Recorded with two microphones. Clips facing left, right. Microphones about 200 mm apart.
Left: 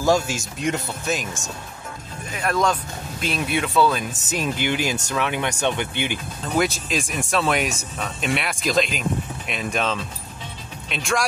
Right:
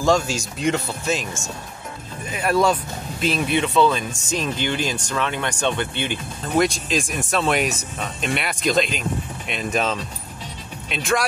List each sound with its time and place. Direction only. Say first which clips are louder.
0.0 s speech: right 1 dB; 5° left (ahead or behind)
6.5 s speech: right 2 dB; centre (ahead or behind)